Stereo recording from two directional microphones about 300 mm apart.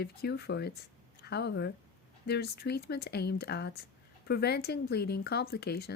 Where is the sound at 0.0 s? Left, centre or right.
Left.